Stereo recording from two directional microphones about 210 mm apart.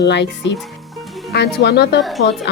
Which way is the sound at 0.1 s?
55° left (ahead or behind).